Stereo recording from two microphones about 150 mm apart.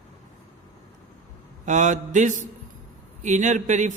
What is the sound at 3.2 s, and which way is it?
Speech, 55° right (ahead or behind).